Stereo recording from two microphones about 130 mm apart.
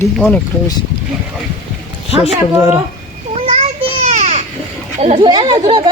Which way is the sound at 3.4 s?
55° right (ahead or behind).